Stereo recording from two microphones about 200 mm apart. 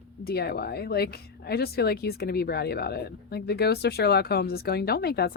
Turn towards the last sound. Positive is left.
turn(degrees=50)  # may be behind; listen again after turning